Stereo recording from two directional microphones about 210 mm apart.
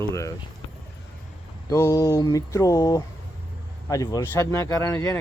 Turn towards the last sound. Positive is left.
turn(degrees=10)  # may be behind; listen again after turning